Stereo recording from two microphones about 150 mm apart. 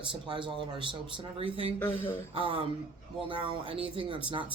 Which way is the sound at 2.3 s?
35° right (ahead or behind).